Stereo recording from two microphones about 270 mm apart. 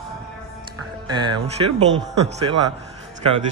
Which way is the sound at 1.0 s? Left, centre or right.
Centre.